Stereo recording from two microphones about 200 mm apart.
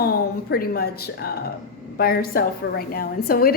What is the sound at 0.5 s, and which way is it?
A woman's voice, 50° left (ahead or behind).